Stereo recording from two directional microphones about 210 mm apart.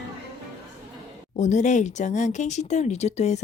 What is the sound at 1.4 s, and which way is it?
Speech, 35° left (ahead or behind).